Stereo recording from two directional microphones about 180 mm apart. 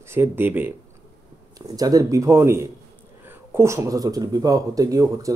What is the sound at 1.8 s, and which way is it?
Speech, 20° right (ahead or behind).